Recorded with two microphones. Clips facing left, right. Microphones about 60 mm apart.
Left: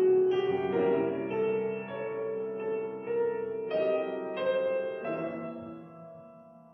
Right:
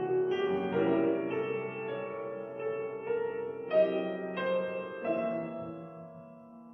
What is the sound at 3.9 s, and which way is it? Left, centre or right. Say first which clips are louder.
Music: left 2 dB; centre.